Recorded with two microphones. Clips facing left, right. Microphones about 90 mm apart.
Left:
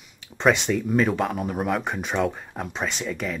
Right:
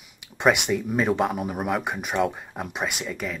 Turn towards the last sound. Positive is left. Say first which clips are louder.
# left 1 dB
turn(degrees=-5)  # may be behind; listen again after turning